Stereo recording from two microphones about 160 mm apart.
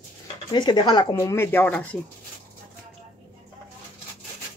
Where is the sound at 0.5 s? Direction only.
30° left (ahead or behind).